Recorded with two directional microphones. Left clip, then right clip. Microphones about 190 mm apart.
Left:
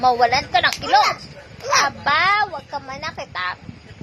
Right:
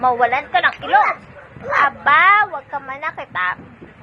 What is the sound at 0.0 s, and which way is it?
Speech, 15° left (ahead or behind).